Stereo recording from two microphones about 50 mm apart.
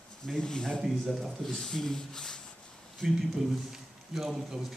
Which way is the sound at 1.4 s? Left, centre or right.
Centre.